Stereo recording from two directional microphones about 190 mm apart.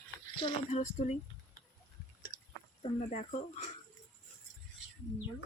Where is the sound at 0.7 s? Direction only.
40° left (ahead or behind).